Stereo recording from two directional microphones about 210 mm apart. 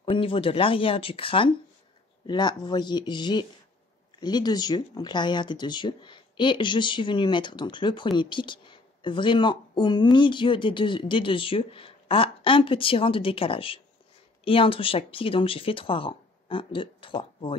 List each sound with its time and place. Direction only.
0.0 s speech: 25° left (ahead or behind)